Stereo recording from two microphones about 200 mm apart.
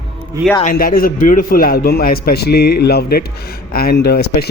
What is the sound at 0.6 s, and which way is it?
A man's voice, 45° left (ahead or behind).